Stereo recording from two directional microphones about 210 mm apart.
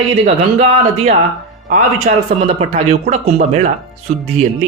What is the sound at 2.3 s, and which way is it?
Speech, 25° right (ahead or behind).